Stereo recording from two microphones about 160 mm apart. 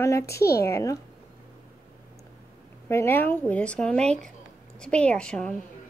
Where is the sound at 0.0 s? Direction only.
20° left (ahead or behind).